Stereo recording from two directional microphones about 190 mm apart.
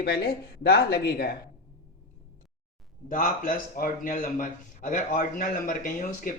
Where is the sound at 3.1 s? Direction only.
50° left (ahead or behind).